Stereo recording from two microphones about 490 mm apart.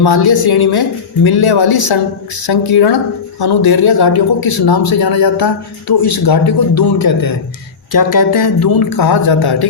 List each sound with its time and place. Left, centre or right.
0.0 s a man's voice: left